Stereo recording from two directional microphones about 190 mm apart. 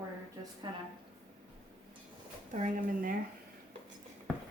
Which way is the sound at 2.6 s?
45° right (ahead or behind).